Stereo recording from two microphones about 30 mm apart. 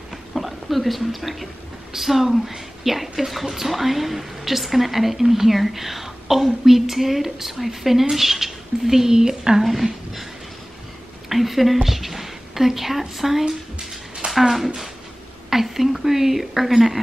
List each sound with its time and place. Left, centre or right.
0.3 s a woman's voice: centre; by 9.6 s right
9.6 s speech: centre
11.2 s a woman's voice: centre
13.7 s a sound: right
15.5 s a woman's voice: centre